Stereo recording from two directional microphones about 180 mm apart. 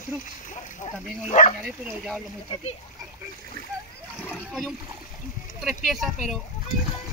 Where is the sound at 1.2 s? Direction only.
40° left (ahead or behind).